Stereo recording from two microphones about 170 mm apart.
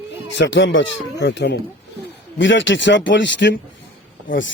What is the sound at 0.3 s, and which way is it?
Speech, 90° left.